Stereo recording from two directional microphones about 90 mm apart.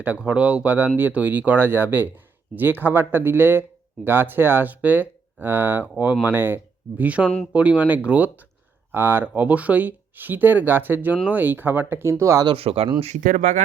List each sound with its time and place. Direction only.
0.0 s speech: 15° right (ahead or behind); by 12.5 s 35° right (ahead or behind)
12.5 s speech: 90° right